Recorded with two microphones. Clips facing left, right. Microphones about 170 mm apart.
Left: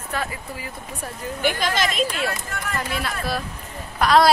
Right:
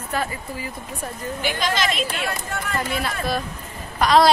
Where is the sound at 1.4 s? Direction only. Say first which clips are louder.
Left 1 dB; 50° left (ahead or behind).